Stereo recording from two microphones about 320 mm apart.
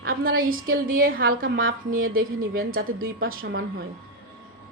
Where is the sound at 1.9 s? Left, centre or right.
Right.